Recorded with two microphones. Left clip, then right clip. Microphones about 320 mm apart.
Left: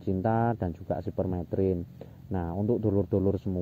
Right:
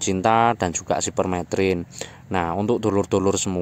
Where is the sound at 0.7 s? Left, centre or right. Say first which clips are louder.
Right 10 dB; right.